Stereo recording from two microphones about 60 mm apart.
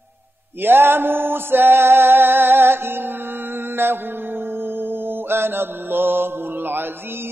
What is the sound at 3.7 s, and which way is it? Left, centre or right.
Music, right.